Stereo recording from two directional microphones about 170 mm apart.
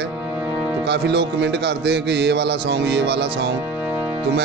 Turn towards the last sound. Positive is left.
turn(degrees=-80)